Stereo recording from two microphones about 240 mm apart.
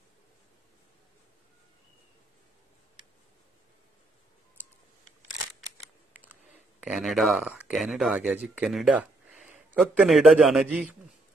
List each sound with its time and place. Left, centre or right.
6.8 s speech: centre